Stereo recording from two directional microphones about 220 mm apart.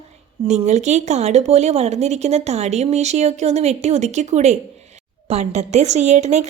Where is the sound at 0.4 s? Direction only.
30° right (ahead or behind).